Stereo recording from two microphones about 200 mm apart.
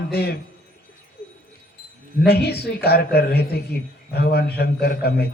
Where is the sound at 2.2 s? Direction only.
55° left (ahead or behind).